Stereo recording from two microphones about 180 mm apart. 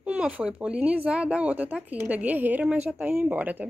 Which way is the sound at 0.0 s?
5° right (ahead or behind).